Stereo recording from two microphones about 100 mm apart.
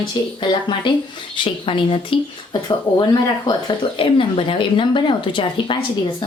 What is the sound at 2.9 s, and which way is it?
Speech, 40° left (ahead or behind).